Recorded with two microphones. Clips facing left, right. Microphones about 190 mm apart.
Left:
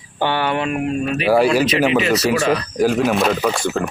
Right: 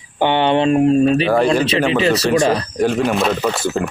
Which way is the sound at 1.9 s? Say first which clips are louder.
Right 1 dB; 30° right (ahead or behind).